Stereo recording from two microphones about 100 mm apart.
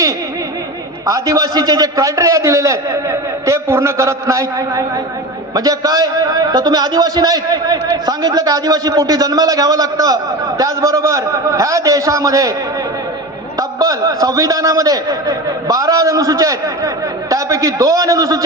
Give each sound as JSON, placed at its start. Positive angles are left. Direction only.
{"t": 1.0, "sound": "a man's voice", "side_deg": -35}
{"t": 13.6, "sound": "a man's voice", "side_deg": -40}